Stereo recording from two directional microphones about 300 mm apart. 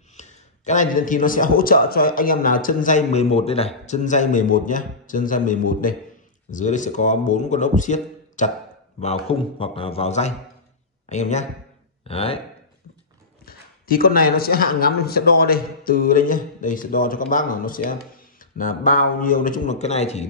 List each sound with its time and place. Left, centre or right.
0.1 s speech: left
13.5 s speech: left